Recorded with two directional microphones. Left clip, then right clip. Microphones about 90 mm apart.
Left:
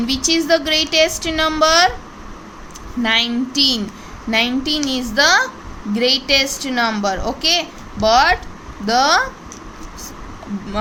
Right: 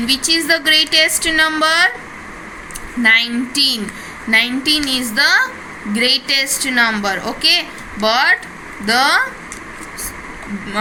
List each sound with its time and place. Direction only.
0.0 s a woman's voice: 55° left (ahead or behind)
3.0 s a woman's voice: 50° left (ahead or behind)